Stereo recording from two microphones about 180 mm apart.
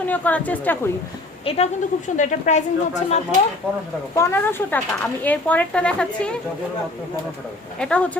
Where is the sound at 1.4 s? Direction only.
35° left (ahead or behind).